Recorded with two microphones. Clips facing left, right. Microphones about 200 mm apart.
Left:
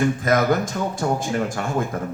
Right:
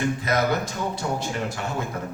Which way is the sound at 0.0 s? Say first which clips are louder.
Left 4 dB; 50° left (ahead or behind).